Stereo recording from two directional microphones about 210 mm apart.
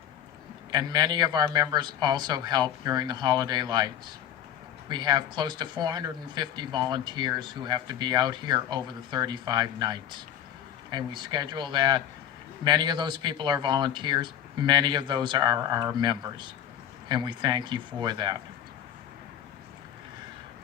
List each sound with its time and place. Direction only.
0.7 s speech: 20° right (ahead or behind)